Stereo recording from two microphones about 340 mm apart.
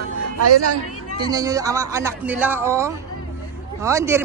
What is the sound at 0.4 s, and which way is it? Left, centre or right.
Speech, right.